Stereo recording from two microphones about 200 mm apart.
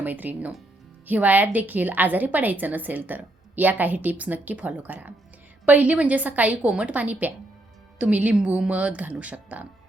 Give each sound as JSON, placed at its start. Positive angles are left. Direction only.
{"t": 0.0, "sound": "a woman's voice", "side_deg": -10}